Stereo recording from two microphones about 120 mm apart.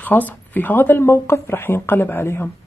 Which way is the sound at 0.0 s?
15° left (ahead or behind).